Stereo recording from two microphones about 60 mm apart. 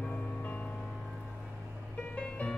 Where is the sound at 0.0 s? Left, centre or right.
Left.